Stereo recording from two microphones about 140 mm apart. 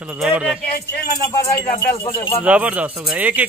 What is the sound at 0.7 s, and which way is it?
Speech, 90° left.